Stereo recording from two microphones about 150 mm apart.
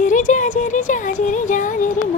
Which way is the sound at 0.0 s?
60° left (ahead or behind).